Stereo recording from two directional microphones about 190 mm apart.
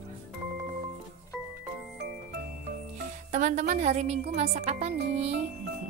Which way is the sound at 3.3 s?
40° right (ahead or behind).